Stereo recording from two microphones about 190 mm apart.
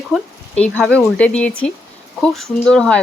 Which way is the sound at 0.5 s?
5° left (ahead or behind).